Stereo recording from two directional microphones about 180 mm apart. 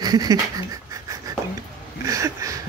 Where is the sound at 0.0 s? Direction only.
20° right (ahead or behind).